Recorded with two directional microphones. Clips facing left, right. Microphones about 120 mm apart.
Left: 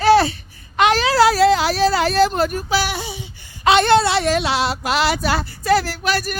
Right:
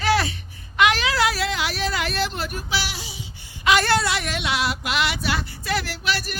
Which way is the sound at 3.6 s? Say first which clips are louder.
Left 6 dB; 25° left (ahead or behind).